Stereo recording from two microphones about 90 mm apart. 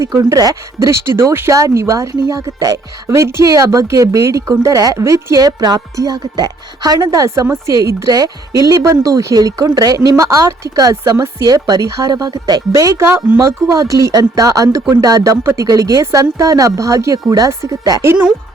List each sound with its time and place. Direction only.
0.0 s speech: 35° right (ahead or behind)
7.0 s speech: 35° right (ahead or behind)
11.4 s speech: 45° right (ahead or behind)
13.1 s speech: 25° right (ahead or behind)
13.4 s speech: 40° right (ahead or behind)